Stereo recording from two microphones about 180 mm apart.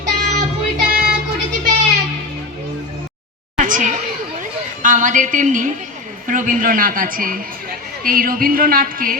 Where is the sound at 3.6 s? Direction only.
45° right (ahead or behind).